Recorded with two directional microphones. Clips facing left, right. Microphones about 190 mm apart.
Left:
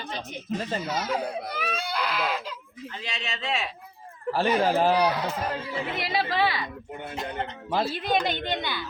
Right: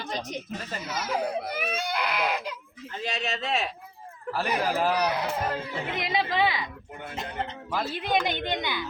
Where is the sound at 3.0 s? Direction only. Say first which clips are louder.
Right 3 dB; 45° right (ahead or behind).